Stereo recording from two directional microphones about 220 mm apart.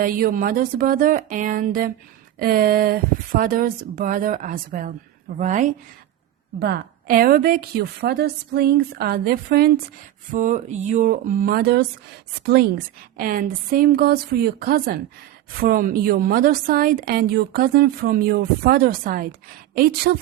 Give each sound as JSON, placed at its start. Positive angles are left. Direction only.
{"t": 0.0, "sound": "a woman's voice", "side_deg": -40}
{"t": 6.6, "sound": "a woman's voice", "side_deg": -50}